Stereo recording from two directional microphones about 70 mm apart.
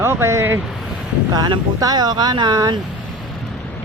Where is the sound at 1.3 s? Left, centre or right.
Right.